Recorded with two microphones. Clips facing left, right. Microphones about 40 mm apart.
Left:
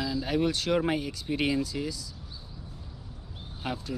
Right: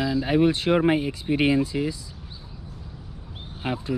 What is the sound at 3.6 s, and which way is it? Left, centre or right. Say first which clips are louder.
Speech: right 5 dB; right.